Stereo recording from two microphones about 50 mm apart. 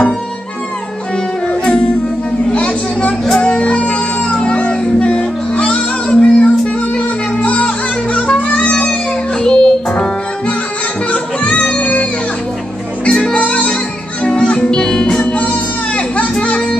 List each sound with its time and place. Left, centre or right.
1.5 s music: centre
2.5 s a sound: left
3.3 s music: left
9.4 s music: centre
11.1 s music: left
13.0 s music: left